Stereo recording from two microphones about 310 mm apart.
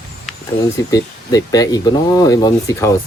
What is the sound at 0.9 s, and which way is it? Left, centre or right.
Speech, centre.